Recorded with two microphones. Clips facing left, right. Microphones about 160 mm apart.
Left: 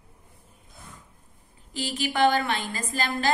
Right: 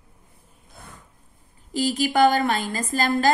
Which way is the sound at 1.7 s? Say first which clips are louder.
Right 7 dB; 40° right (ahead or behind).